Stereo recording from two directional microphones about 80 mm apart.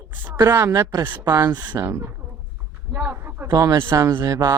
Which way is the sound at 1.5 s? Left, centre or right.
Right.